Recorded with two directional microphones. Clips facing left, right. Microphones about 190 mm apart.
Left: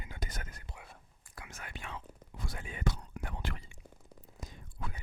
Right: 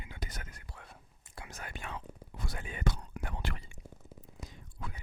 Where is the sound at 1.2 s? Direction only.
30° right (ahead or behind); by 2.0 s 45° right (ahead or behind).